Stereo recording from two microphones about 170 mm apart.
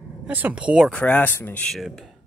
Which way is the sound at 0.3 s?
10° right (ahead or behind).